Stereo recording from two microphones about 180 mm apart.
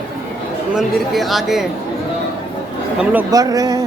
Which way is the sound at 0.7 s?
Centre (ahead or behind).